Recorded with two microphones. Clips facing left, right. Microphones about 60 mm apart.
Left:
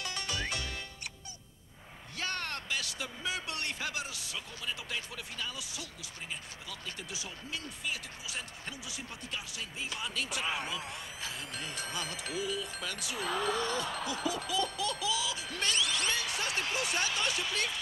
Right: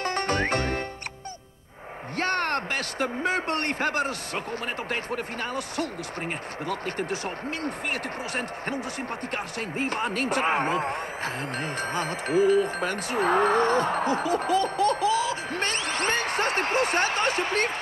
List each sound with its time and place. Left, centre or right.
0.0 s music: right
2.1 s speech: right